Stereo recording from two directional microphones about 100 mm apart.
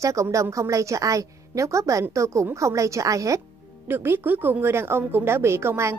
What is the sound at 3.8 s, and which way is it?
A woman's voice, 20° right (ahead or behind).